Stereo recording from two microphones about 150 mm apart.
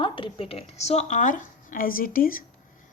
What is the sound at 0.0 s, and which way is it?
A woman's voice, 35° left (ahead or behind).